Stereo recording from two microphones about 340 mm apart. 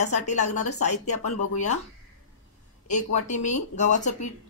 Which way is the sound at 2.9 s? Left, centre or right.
Left.